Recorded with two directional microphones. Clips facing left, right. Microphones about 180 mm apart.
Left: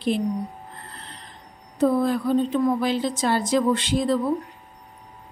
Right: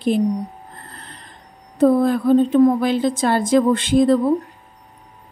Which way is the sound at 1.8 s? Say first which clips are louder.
Right 5 dB; 50° right (ahead or behind).